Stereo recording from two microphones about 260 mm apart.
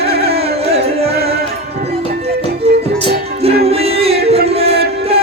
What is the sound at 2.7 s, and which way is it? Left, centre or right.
Music, right.